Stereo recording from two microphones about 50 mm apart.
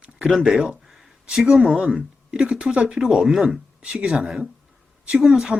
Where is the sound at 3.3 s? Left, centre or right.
Centre.